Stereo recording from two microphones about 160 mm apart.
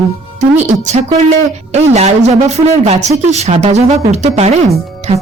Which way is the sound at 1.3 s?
40° right (ahead or behind).